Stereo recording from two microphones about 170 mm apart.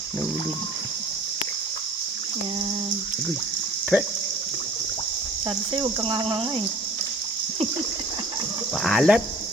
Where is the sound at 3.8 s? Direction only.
10° right (ahead or behind).